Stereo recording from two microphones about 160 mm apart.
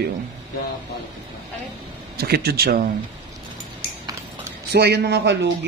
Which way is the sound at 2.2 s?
80° right.